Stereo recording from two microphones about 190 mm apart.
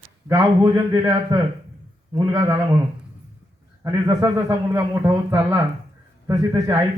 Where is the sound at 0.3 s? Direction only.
15° right (ahead or behind).